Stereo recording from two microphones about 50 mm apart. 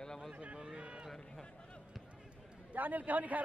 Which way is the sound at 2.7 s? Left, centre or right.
Right.